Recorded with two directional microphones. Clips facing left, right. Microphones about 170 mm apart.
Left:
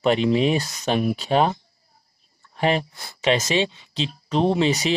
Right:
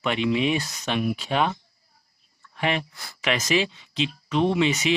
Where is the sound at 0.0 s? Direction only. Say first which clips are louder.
Left 5 dB; 35° left (ahead or behind).